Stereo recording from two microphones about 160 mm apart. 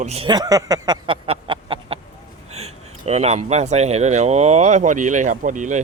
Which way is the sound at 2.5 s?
40° right (ahead or behind).